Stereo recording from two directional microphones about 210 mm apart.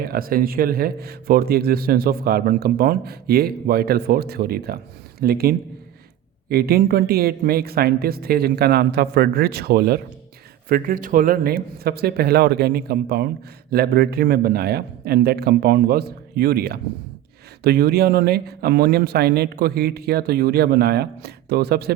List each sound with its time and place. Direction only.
0.0 s speech: 45° right (ahead or behind)